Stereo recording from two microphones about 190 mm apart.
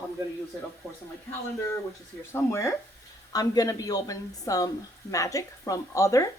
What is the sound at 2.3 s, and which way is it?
Speech, 15° left (ahead or behind).